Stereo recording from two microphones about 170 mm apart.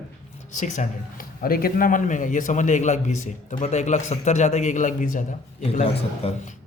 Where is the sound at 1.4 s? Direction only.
60° left (ahead or behind).